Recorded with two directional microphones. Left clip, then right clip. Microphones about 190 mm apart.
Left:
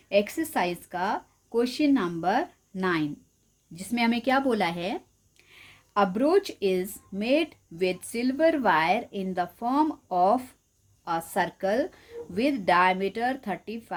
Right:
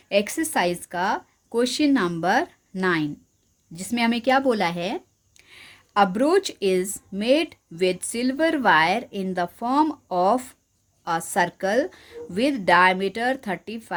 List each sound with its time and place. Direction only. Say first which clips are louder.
0.1 s speech: right 2 dB; 35° right (ahead or behind)